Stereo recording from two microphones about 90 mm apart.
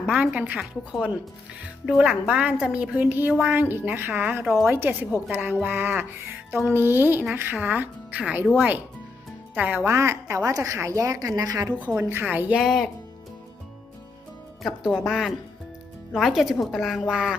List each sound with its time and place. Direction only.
0.0 s a woman's voice: 15° right (ahead or behind)
1.6 s a woman's voice: 10° right (ahead or behind)
9.6 s speech: 20° right (ahead or behind)
9.8 s a woman's voice: 30° right (ahead or behind)
11.7 s speech: 20° right (ahead or behind)
12.5 s a woman's voice: centre (ahead or behind)
14.9 s a woman's voice: 5° right (ahead or behind)